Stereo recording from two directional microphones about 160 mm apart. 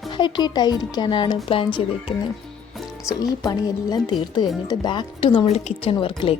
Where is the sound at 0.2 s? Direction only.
25° left (ahead or behind).